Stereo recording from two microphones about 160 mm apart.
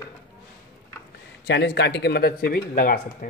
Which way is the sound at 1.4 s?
90° left.